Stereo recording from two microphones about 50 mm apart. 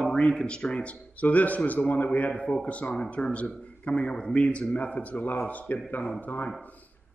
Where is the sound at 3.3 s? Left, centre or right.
Left.